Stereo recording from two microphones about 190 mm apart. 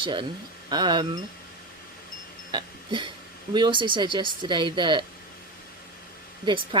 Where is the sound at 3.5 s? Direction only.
25° right (ahead or behind).